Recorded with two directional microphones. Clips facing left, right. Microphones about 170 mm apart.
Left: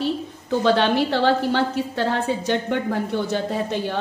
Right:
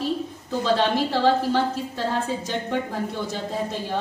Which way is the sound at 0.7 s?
70° left (ahead or behind).